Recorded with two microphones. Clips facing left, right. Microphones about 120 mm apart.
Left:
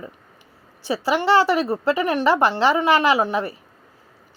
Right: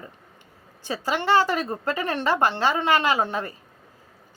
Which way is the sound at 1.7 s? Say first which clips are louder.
Left 6 dB; 15° left (ahead or behind).